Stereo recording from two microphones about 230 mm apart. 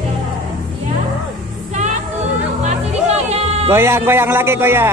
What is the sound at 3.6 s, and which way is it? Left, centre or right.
A man's voice, centre.